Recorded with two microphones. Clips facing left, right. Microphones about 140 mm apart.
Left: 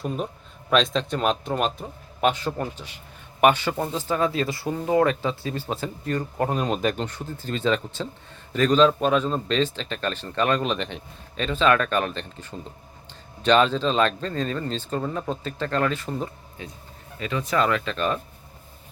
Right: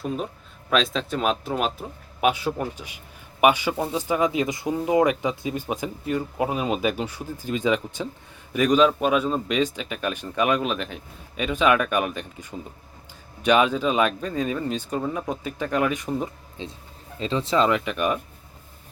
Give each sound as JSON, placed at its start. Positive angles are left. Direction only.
{"t": 0.0, "sound": "speech", "side_deg": 0}